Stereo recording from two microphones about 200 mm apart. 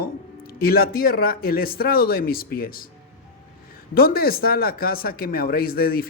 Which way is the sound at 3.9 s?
50° left (ahead or behind).